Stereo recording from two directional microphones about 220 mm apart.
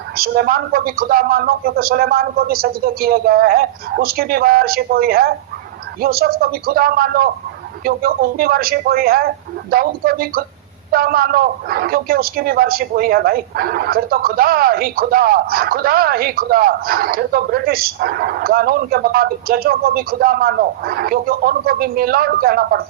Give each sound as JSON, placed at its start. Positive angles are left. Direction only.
{"t": 0.2, "sound": "a man's voice", "side_deg": -45}